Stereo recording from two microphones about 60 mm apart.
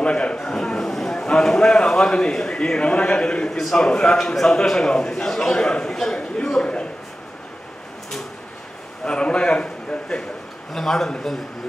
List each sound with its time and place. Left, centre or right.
0.0 s a man's voice: centre
9.0 s a man's voice: centre
10.7 s a man's voice: centre